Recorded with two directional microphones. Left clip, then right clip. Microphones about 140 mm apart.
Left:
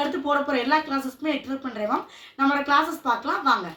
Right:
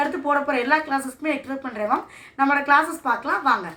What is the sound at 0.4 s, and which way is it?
Speech, centre (ahead or behind).